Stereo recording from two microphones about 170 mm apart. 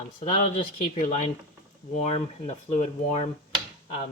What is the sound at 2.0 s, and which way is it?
Speech, 40° left (ahead or behind).